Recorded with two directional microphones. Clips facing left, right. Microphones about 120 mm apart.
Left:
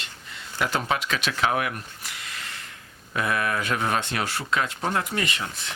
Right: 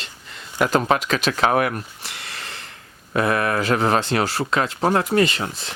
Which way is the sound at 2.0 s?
75° right (ahead or behind).